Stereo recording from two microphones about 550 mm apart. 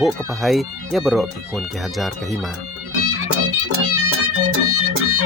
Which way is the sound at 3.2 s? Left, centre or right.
Right.